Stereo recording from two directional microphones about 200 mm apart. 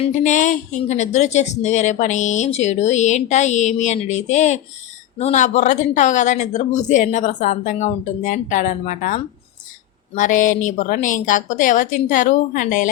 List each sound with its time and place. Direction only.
0.2 s speech: 40° left (ahead or behind)